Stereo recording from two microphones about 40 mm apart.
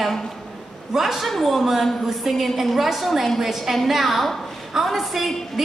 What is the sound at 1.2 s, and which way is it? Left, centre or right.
A man's voice, centre.